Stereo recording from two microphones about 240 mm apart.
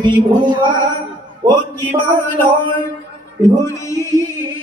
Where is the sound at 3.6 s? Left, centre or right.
Centre.